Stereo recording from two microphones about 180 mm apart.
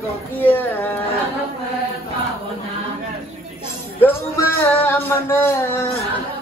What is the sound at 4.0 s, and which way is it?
Speech, 15° left (ahead or behind).